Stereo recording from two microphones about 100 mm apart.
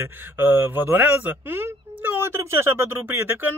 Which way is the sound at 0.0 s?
20° right (ahead or behind).